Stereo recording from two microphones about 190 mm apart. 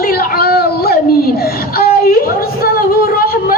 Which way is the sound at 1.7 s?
50° left (ahead or behind).